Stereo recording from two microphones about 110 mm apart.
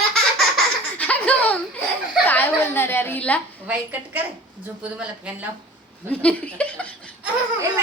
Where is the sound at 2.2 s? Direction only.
15° left (ahead or behind).